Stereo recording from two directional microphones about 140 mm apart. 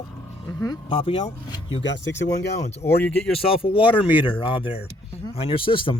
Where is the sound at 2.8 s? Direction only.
20° left (ahead or behind).